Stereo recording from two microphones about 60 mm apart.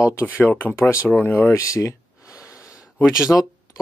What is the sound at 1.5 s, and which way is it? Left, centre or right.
Speech, left.